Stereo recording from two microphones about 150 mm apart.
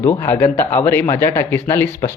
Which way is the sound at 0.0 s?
15° left (ahead or behind).